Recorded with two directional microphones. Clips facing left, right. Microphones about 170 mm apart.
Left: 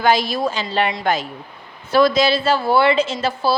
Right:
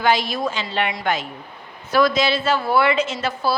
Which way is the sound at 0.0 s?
40° left (ahead or behind).